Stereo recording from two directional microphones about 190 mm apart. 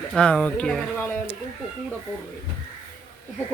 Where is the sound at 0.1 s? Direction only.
5° left (ahead or behind).